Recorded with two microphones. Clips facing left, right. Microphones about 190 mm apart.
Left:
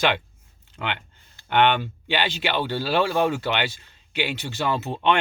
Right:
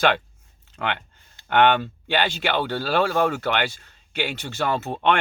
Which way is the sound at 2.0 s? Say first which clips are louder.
Right 2 dB; 50° right (ahead or behind).